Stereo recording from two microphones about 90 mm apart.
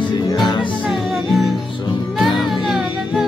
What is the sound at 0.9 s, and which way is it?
Music, centre (ahead or behind).